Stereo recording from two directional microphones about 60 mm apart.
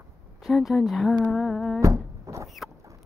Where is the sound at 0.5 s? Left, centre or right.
Centre.